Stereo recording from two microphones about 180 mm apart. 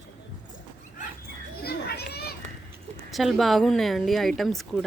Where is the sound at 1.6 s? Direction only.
65° left (ahead or behind).